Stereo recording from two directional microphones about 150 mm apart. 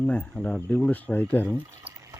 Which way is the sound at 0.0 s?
10° left (ahead or behind).